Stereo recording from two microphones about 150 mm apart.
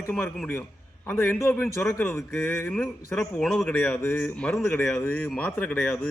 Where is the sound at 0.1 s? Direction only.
5° left (ahead or behind).